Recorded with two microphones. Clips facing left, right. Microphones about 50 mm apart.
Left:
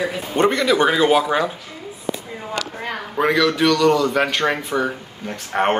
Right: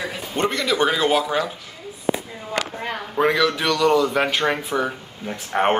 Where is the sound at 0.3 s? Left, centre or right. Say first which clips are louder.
Left 5 dB; centre.